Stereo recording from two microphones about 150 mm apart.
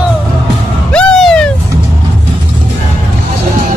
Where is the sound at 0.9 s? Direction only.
5° left (ahead or behind).